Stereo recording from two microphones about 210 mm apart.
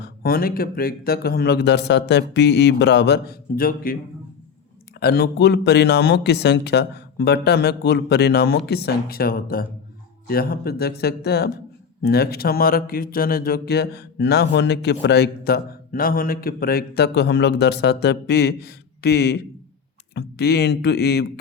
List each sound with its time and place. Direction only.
0.0 s speech: 45° left (ahead or behind)
4.9 s speech: 50° left (ahead or behind)